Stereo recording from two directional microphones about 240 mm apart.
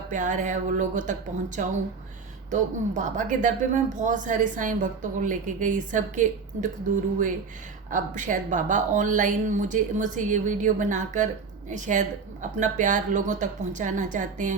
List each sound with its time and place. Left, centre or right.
0.1 s speech: right
2.5 s speech: right
7.9 s speech: right